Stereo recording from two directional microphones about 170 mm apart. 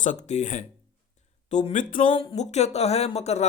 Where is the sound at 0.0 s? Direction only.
45° left (ahead or behind).